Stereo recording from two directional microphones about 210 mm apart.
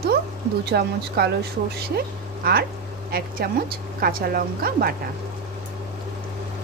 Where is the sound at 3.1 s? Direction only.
45° right (ahead or behind).